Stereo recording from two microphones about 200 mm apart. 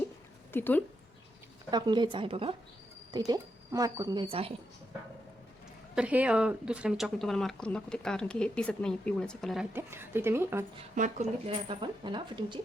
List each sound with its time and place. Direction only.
0.5 s speech: 10° left (ahead or behind)
1.7 s speech: 20° right (ahead or behind)
5.9 s speech: 5° right (ahead or behind)
9.7 s a woman's voice: 10° right (ahead or behind)
10.9 s speech: 35° right (ahead or behind)